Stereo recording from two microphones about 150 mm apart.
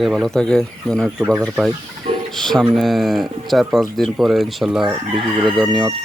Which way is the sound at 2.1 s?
40° right (ahead or behind).